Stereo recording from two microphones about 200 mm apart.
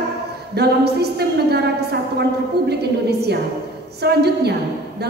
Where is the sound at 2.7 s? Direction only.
55° right (ahead or behind).